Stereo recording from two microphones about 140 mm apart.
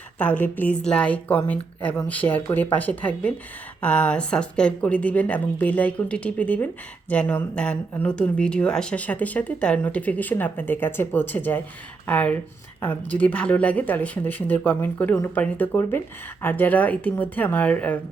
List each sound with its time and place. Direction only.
0.2 s speech: 10° left (ahead or behind)